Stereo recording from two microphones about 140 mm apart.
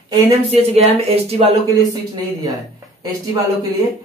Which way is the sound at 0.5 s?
45° right (ahead or behind).